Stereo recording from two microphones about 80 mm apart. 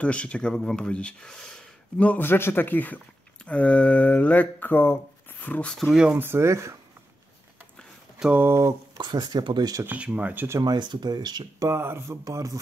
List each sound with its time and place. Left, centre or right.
0.0 s speech: centre
2.0 s speech: left
5.8 s speech: centre
6.1 s speech: right
8.4 s speech: right
8.9 s speech: right
9.8 s speech: centre
10.6 s speech: right
11.7 s speech: right
12.3 s speech: right